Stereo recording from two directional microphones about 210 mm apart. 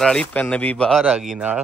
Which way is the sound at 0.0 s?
5° left (ahead or behind).